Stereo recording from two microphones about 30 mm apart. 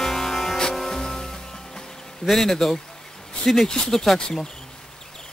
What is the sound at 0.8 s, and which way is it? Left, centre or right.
Music, left.